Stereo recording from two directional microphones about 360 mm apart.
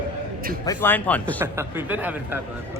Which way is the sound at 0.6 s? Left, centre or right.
Centre.